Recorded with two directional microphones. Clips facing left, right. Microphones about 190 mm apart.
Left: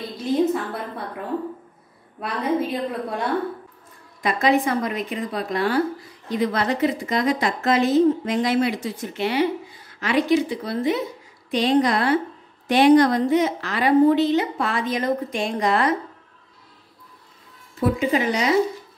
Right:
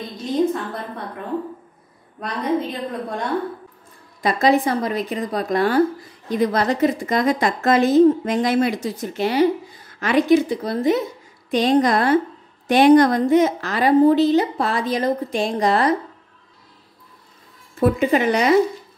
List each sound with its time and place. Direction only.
0.5 s a woman's voice: 5° left (ahead or behind)
2.1 s a woman's voice: 5° left (ahead or behind)
4.2 s a woman's voice: 35° right (ahead or behind)
17.7 s a woman's voice: 55° right (ahead or behind)